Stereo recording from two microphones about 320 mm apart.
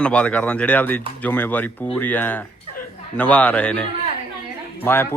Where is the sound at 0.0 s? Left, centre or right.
Centre.